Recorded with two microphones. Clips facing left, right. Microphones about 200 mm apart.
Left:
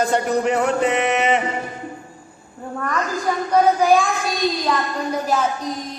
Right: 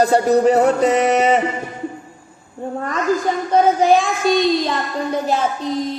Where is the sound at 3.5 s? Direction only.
25° right (ahead or behind).